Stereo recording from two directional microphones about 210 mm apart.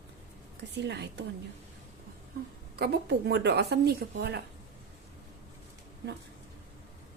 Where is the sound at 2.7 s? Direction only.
50° right (ahead or behind).